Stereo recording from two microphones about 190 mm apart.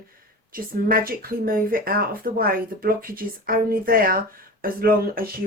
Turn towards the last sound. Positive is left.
turn(degrees=-50)  # may be behind; listen again after turning